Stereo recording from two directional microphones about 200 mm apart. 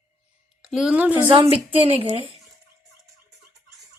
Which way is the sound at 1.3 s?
30° right (ahead or behind).